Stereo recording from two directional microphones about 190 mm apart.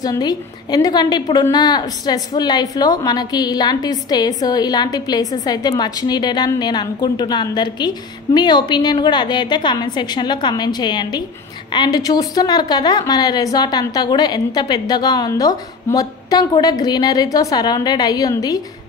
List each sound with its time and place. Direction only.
0.0 s a woman's voice: 20° left (ahead or behind)